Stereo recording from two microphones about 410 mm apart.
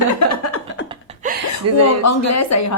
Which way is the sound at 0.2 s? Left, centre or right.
Left.